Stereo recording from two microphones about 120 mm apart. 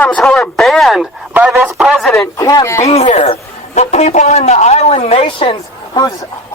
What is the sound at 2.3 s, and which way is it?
Speech, 30° left (ahead or behind).